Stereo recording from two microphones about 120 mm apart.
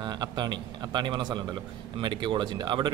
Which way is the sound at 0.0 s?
35° right (ahead or behind).